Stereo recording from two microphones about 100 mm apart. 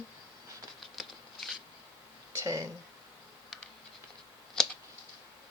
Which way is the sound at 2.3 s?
30° right (ahead or behind).